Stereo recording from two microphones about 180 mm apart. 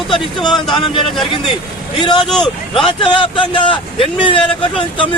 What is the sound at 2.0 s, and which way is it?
Speech, 25° left (ahead or behind).